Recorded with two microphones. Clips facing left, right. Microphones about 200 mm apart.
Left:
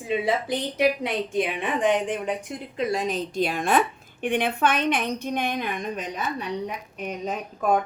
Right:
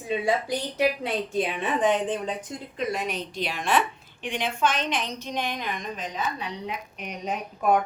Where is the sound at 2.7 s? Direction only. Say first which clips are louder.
Left 4 dB; 30° left (ahead or behind).